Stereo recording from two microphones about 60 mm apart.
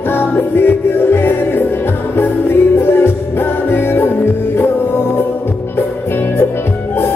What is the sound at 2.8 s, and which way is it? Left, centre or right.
Music, left.